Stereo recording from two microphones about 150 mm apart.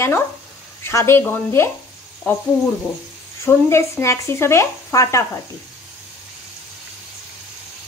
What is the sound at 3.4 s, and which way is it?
Speech, 20° left (ahead or behind).